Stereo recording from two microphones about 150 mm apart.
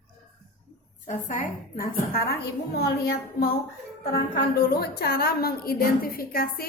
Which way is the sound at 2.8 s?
90° left.